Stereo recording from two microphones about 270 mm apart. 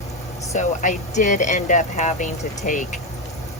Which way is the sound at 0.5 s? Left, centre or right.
Left.